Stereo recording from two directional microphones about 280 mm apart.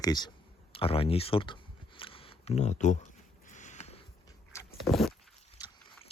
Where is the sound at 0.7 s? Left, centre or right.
Centre.